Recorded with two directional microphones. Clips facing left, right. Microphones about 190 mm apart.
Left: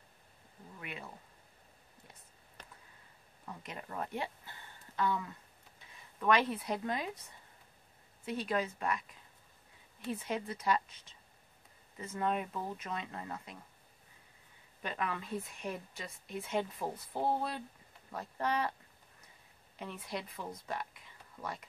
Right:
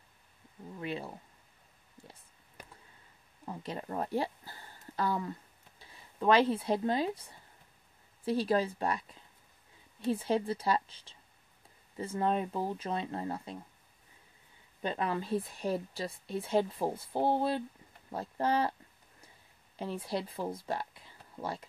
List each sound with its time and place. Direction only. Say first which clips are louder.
0.7 s a woman's voice: right 9 dB; 30° right (ahead or behind)
2.6 s a sound: right 3 dB; 10° right (ahead or behind)
3.4 s speech: right 7 dB; 30° right (ahead or behind)
8.3 s a woman's voice: right 6 dB; 35° right (ahead or behind)
14.8 s a woman's voice: right 5 dB; 30° right (ahead or behind)
19.8 s speech: right 6 dB; 30° right (ahead or behind)